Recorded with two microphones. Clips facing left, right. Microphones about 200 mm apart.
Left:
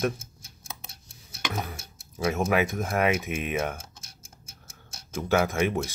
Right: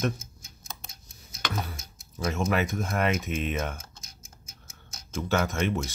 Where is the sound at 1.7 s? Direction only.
70° left (ahead or behind).